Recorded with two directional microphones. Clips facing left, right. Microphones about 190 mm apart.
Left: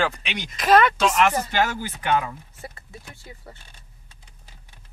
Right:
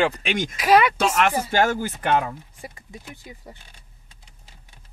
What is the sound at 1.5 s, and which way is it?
Speech, 50° right (ahead or behind).